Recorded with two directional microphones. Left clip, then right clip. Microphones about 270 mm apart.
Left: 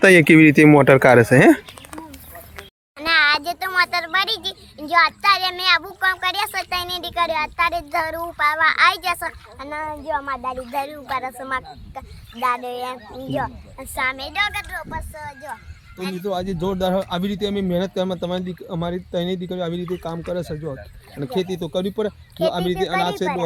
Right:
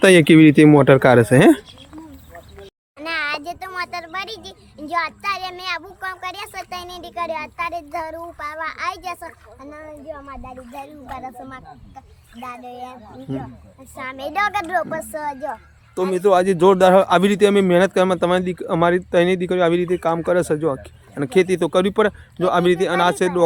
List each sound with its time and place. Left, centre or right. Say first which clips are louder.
0.0 s a child's voice: even; centre
3.0 s a child's voice: left 7 dB; centre
13.9 s a child's voice: left 7 dB; centre
14.3 s speech: right 3 dB; right
16.0 s a man's voice: right 10 dB; centre